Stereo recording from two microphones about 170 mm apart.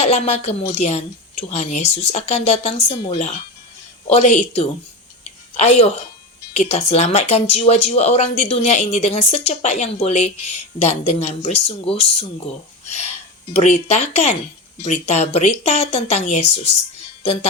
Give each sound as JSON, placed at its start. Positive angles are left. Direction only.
{"t": 0.0, "sound": "speech", "side_deg": 40}
{"t": 12.8, "sound": "a sound", "side_deg": 40}
{"t": 13.5, "sound": "speech", "side_deg": 40}